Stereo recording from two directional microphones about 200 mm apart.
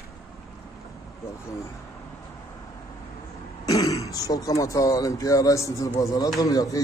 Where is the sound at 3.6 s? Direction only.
15° left (ahead or behind).